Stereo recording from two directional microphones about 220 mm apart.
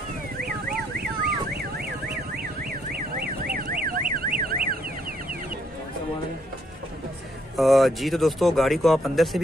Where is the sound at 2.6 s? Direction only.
40° right (ahead or behind).